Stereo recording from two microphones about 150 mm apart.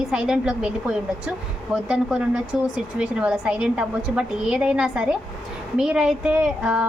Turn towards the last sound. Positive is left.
turn(degrees=-5)  # may be behind; listen again after turning